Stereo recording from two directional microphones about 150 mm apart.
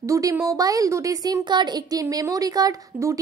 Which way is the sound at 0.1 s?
20° right (ahead or behind).